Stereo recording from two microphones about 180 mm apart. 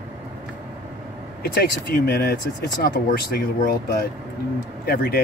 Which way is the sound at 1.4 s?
60° left (ahead or behind).